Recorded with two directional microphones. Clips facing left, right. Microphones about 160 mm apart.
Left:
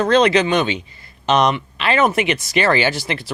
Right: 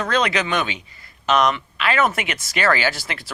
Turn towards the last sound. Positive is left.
turn(degrees=20)  # may be behind; listen again after turning